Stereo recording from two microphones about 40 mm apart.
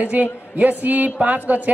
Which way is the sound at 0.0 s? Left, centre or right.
Right.